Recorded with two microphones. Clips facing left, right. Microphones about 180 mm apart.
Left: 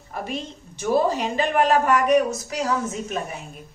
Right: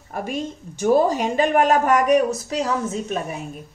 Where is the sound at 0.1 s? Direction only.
45° right (ahead or behind).